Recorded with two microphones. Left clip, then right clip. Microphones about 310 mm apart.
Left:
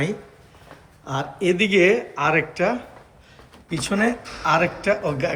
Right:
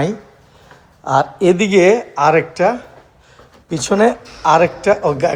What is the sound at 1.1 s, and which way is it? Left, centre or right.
Speech, right.